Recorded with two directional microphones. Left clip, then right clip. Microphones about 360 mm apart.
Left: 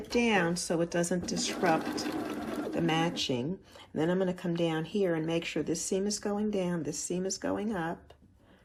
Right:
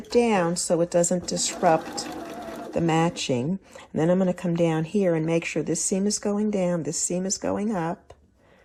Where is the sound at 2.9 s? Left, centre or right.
Centre.